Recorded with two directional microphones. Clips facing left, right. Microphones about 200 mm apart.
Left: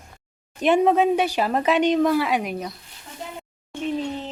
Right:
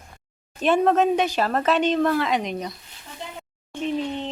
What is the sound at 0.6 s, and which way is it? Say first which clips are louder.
A woman's voice: left 1 dB; 15° left (ahead or behind).